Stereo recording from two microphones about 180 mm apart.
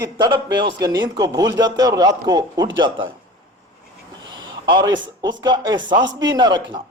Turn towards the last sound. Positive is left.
turn(degrees=-25)  # may be behind; listen again after turning